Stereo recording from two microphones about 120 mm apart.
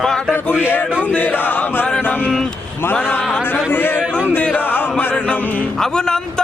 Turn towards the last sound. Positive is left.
turn(degrees=5)  # may be behind; listen again after turning